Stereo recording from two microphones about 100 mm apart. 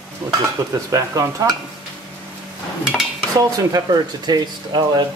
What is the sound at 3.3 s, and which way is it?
Speech, 35° right (ahead or behind).